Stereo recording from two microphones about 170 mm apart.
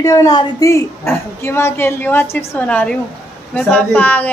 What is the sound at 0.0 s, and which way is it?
Speech, 20° left (ahead or behind).